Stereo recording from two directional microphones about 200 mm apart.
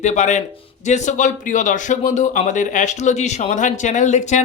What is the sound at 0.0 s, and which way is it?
Speech, 35° left (ahead or behind).